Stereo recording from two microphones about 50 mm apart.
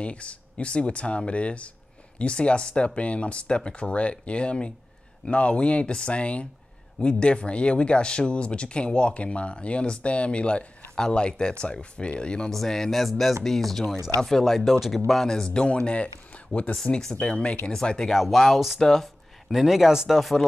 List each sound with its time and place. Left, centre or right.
0.0 s speech: left
12.4 s speech: centre
15.4 s speech: centre
18.1 s speech: centre
19.5 s speech: centre